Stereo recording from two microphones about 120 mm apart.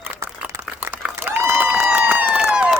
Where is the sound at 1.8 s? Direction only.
15° right (ahead or behind).